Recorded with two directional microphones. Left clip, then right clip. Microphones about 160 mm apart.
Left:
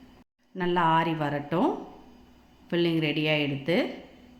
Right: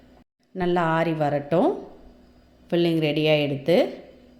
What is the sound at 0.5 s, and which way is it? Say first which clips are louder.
A woman's voice: right 1 dB; 25° right (ahead or behind).